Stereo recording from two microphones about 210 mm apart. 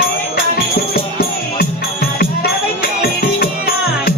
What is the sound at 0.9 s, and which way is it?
Music, 45° left (ahead or behind).